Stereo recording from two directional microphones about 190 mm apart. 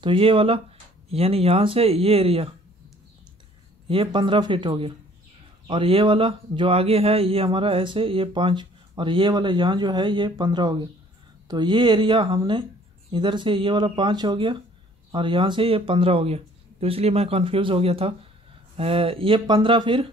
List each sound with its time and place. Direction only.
0.0 s speech: 30° right (ahead or behind)
3.8 s speech: 30° right (ahead or behind)